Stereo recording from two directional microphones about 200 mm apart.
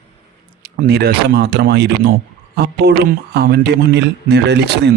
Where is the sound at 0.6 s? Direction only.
50° right (ahead or behind).